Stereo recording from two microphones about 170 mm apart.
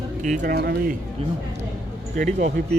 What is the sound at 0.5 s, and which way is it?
Speech, 70° right (ahead or behind).